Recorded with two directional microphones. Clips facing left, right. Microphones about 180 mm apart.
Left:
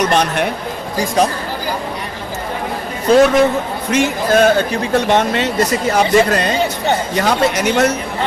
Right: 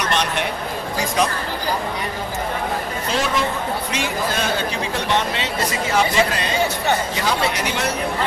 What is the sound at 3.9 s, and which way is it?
A man's voice, 50° left (ahead or behind).